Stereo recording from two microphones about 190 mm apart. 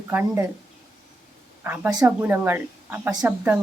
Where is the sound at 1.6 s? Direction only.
10° right (ahead or behind).